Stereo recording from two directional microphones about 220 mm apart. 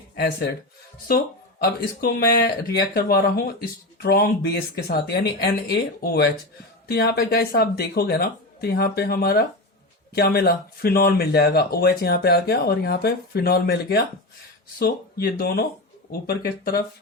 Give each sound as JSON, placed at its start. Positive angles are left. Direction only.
{"t": 0.2, "sound": "speech", "side_deg": 45}
{"t": 1.6, "sound": "speech", "side_deg": 45}